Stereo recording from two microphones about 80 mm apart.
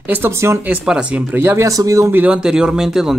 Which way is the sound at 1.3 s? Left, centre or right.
Right.